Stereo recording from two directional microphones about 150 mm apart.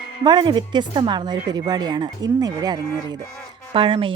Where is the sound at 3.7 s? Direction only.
35° right (ahead or behind).